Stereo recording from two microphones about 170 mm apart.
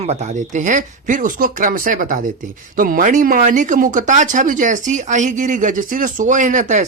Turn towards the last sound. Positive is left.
turn(degrees=-50)  # may be behind; listen again after turning